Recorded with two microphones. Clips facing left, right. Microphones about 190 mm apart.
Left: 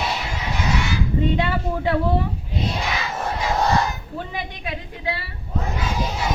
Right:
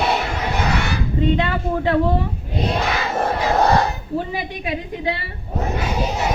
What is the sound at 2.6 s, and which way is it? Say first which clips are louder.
Battle cry: right 5 dB; 60° right (ahead or behind).